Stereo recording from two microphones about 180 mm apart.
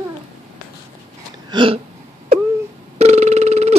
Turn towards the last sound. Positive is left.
turn(degrees=-35)  # may be behind; listen again after turning